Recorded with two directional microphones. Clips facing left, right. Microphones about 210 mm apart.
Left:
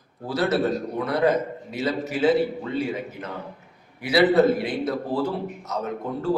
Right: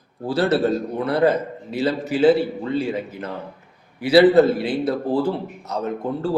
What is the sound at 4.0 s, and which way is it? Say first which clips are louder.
A man's voice: right 5 dB; 30° right (ahead or behind).